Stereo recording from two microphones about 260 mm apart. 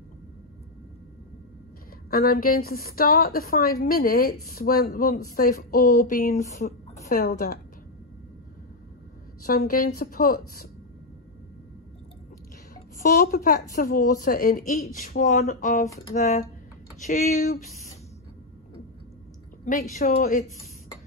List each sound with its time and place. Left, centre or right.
2.0 s a woman's voice: left
9.4 s a woman's voice: left
13.0 s a woman's voice: left
19.6 s a woman's voice: left